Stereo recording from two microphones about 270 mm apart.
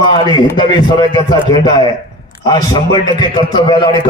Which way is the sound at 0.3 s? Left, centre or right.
Centre.